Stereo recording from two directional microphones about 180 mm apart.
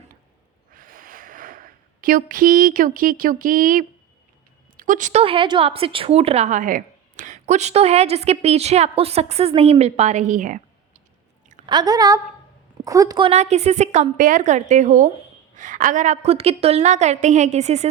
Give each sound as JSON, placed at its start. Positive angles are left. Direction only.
{"t": 0.7, "sound": "a sound", "side_deg": -50}
{"t": 4.8, "sound": "a woman's voice", "side_deg": -45}
{"t": 5.2, "sound": "a woman's voice", "side_deg": -30}
{"t": 11.6, "sound": "a woman's voice", "side_deg": -25}